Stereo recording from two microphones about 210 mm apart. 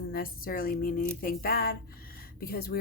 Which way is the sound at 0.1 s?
45° left (ahead or behind).